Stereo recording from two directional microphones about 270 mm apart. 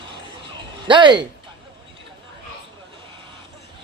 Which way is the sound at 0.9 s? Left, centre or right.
Centre.